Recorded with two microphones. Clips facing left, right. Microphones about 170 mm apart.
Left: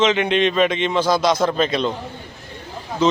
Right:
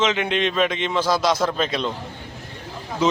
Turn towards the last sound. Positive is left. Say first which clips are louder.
# left 3 dB
turn(degrees=-10)  # may be behind; listen again after turning